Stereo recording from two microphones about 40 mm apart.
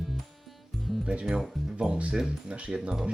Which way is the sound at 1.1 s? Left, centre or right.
Right.